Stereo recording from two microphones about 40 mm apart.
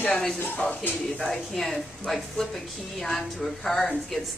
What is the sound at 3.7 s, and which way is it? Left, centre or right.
Speech, left.